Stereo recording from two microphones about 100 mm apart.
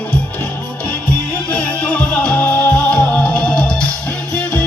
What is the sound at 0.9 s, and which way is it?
Music, 15° left (ahead or behind).